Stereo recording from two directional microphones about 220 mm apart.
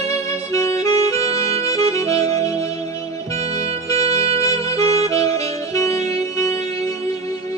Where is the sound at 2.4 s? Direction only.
15° left (ahead or behind).